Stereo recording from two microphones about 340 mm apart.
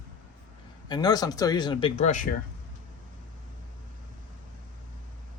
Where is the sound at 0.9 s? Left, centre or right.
Centre.